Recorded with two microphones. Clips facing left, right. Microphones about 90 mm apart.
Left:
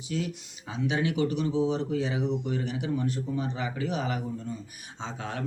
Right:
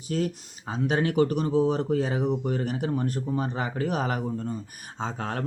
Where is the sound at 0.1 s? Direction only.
45° right (ahead or behind).